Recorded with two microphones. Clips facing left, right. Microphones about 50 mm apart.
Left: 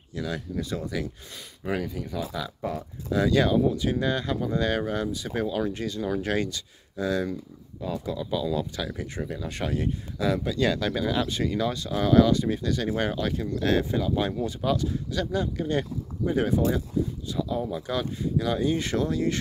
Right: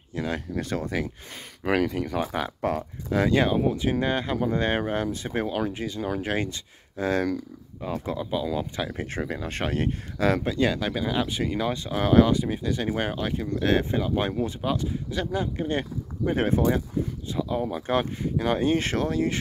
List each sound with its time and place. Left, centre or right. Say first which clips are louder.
0.1 s speech: right 2 dB; right
0.6 s speech: right 2 dB; right
0.9 s speech: right 2 dB; right
1.7 s speech: right 6 dB; right
3.1 s speech: even; right
5.7 s speech: left 1 dB; centre
8.9 s speech: right 3 dB; right
10.5 s speech: even; right
12.4 s speech: even; centre; by 16.8 s right
17.3 s speech: right 5 dB; right